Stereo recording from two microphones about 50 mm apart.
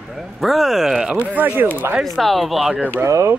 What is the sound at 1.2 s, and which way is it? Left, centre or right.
Speech, right.